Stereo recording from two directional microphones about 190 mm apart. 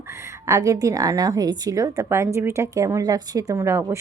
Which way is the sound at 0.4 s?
15° right (ahead or behind).